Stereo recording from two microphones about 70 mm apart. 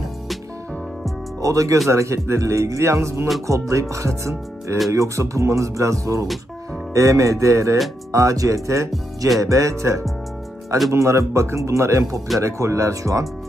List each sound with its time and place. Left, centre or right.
1.4 s speech: right